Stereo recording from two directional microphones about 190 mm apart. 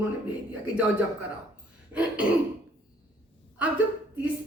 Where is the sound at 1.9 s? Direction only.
5° right (ahead or behind).